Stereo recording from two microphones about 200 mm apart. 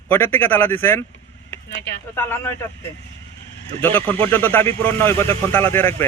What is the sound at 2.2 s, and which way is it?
Speech, 10° left (ahead or behind).